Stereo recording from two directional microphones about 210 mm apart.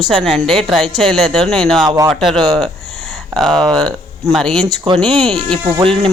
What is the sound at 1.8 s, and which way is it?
Speech, 15° right (ahead or behind).